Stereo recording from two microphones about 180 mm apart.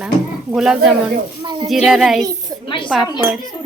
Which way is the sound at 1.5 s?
25° right (ahead or behind).